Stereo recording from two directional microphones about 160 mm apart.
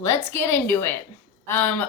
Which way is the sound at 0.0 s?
15° left (ahead or behind).